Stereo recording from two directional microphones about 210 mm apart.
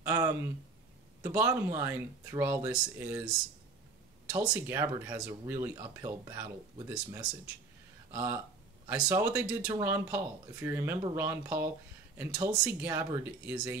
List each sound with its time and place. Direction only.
0.0 s a sound: 15° right (ahead or behind)
1.2 s speech: 10° right (ahead or behind)
4.3 s speech: 15° right (ahead or behind)
8.1 s speech: 10° right (ahead or behind)